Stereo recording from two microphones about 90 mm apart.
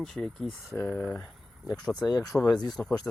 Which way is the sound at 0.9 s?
10° left (ahead or behind).